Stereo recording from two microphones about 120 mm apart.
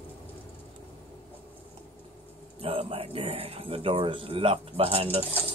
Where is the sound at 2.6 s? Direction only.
50° right (ahead or behind).